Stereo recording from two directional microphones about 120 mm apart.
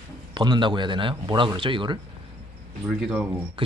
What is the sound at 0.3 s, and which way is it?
Speech, 40° right (ahead or behind).